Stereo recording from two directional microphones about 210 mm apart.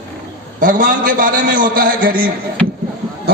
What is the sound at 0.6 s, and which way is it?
A man's voice, 40° right (ahead or behind).